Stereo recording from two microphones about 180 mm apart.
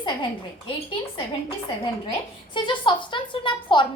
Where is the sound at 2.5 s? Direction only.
25° left (ahead or behind).